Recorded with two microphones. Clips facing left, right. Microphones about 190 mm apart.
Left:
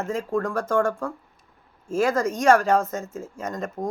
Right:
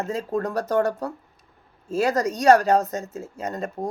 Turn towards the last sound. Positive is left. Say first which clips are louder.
# right 1 dB
turn(degrees=-35)  # may be behind; listen again after turning